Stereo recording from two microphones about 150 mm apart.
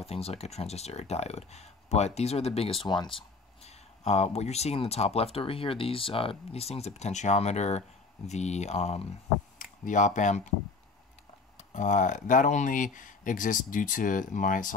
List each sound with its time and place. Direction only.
0.0 s speech: 40° left (ahead or behind)
3.2 s speech: 45° left (ahead or behind)
9.6 s speech: 60° left (ahead or behind)
11.5 s speech: 55° left (ahead or behind)